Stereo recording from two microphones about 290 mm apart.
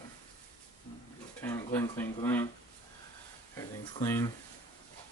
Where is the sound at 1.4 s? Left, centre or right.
Centre.